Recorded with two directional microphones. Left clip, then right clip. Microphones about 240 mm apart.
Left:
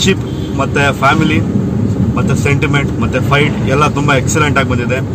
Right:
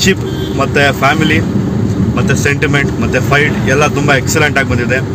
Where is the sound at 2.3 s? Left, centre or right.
Centre.